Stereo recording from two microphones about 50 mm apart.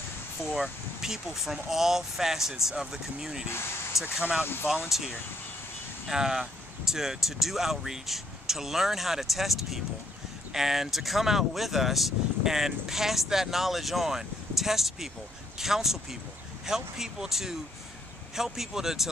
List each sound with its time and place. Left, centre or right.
0.4 s speech: centre
3.9 s speech: left
4.4 s speech: left
4.8 s speech: centre